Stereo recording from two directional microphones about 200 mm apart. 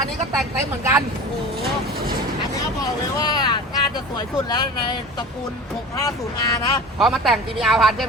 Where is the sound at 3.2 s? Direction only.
20° left (ahead or behind).